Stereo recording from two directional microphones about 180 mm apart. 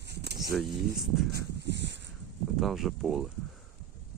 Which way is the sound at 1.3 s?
65° right (ahead or behind).